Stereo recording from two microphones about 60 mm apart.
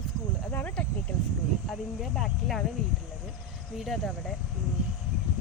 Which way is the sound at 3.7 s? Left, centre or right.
Centre.